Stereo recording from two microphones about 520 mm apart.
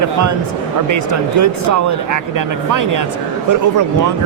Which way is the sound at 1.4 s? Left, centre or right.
Right.